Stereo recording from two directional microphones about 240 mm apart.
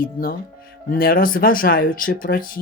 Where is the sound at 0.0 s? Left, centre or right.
Left.